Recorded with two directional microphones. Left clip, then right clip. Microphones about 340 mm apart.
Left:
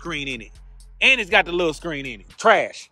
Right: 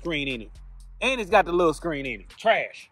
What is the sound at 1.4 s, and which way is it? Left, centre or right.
Speech, centre.